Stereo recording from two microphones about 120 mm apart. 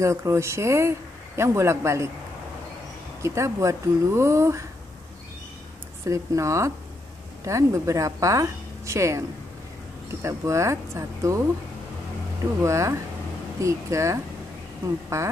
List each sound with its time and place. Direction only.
0.0 s speech: 25° right (ahead or behind)
3.2 s speech: 25° right (ahead or behind)
6.0 s speech: 25° right (ahead or behind)
10.2 s speech: 25° right (ahead or behind)
12.6 s speech: 25° right (ahead or behind)